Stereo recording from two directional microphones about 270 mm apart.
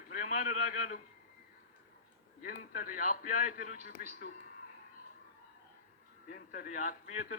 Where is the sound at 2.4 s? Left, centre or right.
Left.